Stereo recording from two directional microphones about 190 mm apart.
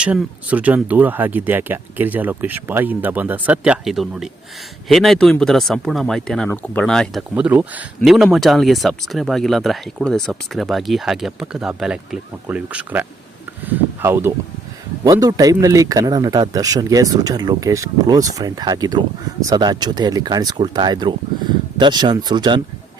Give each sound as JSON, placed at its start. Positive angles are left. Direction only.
{"t": 0.0, "sound": "speech", "side_deg": -5}